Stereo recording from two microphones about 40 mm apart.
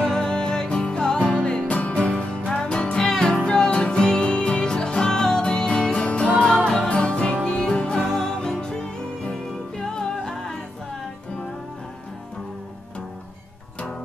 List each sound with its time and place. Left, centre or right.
0.0 s music: centre
6.4 s music: centre
8.1 s music: centre